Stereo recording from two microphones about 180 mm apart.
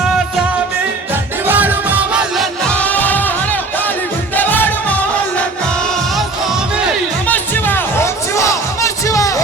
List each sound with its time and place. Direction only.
1.5 s music: 10° right (ahead or behind)
2.6 s music: 10° left (ahead or behind)
7.3 s music: 10° left (ahead or behind)